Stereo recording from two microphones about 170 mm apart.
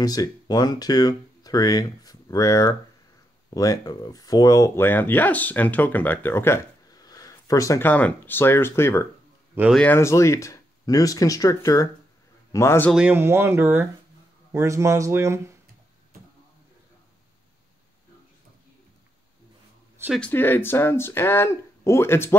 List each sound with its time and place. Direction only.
0.0 s speech: 20° left (ahead or behind)
12.9 s speech: 10° right (ahead or behind)
20.2 s speech: 10° left (ahead or behind)